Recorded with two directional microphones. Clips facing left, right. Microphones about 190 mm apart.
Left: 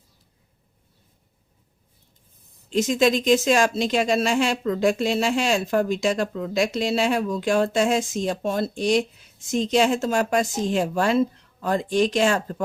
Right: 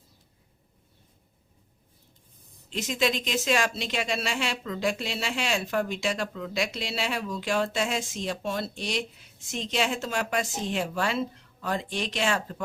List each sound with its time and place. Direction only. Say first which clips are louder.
2.6 s speech: left 8 dB; 45° left (ahead or behind)